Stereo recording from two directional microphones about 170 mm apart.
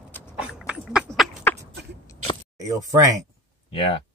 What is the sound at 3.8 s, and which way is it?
Speech, 30° left (ahead or behind).